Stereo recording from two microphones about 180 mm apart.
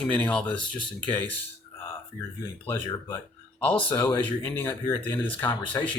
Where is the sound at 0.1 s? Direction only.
5° left (ahead or behind).